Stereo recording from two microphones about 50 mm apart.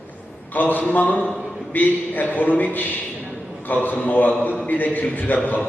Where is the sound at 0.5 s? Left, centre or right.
Left.